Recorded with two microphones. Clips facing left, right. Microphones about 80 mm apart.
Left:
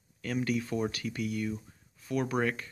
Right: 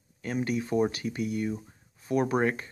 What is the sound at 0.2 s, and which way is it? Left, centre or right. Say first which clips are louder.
Speech: right 1 dB; right.